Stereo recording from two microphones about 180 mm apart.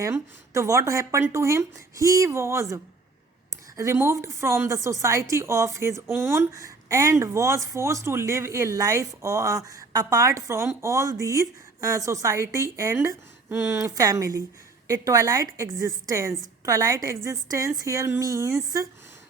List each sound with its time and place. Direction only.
0.0 s speech: 15° right (ahead or behind)